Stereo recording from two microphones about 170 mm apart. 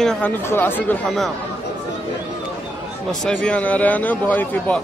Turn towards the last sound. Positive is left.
turn(degrees=10)  # may be behind; listen again after turning